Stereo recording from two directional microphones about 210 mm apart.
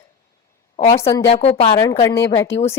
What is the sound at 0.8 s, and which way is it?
A woman's voice, 30° left (ahead or behind).